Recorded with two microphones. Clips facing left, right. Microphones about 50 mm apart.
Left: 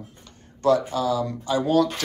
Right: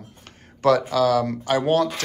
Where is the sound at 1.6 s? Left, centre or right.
Right.